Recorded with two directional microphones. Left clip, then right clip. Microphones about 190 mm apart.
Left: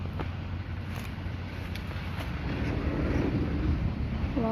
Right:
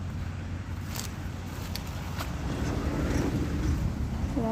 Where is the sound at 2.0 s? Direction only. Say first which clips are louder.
Right 1 dB; 70° right (ahead or behind); by 3.7 s 45° right (ahead or behind).